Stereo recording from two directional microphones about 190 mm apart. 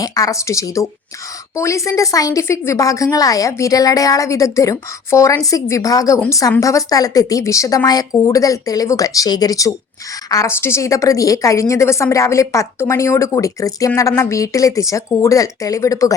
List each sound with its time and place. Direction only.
0.0 s a woman's voice: 20° left (ahead or behind)